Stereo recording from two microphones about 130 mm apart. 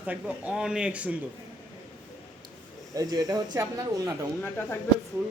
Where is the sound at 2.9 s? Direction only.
25° right (ahead or behind).